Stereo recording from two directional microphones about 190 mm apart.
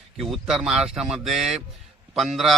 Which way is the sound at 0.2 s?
Centre (ahead or behind).